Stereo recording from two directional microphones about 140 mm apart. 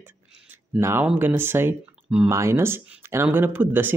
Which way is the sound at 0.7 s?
20° right (ahead or behind).